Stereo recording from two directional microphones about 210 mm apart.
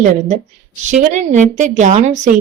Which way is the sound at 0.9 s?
35° right (ahead or behind).